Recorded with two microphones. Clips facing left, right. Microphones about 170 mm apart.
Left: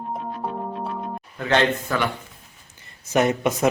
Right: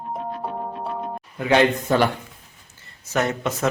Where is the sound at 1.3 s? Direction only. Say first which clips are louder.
Right 2 dB; 10° right (ahead or behind).